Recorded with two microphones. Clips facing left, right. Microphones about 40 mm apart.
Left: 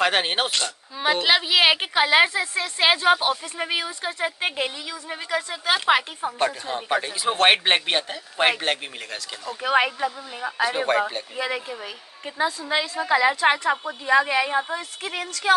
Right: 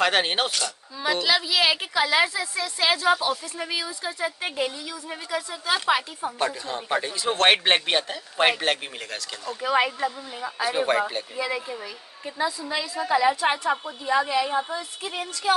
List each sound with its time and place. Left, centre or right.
0.0 s speech: centre
0.5 s speech: left
7.2 s a man's voice: centre
9.6 s a woman's voice: left
10.9 s a man's voice: centre
11.3 s a woman's voice: left
12.6 s a woman's voice: left